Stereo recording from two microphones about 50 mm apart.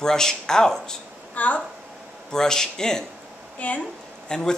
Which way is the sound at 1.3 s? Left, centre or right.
Left.